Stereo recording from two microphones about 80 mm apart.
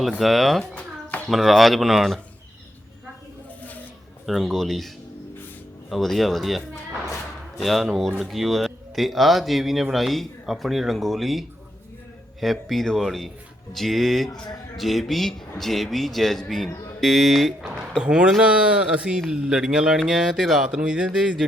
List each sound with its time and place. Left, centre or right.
0.2 s a man's voice: centre
0.7 s a sound: left
1.3 s a man's voice: centre
4.3 s a man's voice: centre
5.9 s a man's voice: centre